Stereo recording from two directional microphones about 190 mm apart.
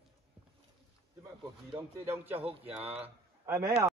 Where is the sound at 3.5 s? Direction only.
15° right (ahead or behind).